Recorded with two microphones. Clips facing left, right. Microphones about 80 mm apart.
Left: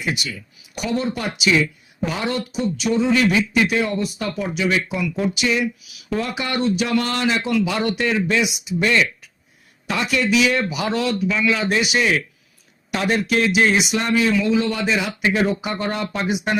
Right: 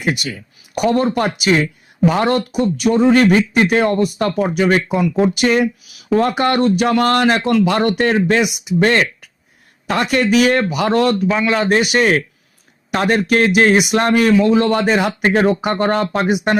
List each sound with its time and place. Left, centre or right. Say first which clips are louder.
0.0 s a man's voice: right 5 dB; right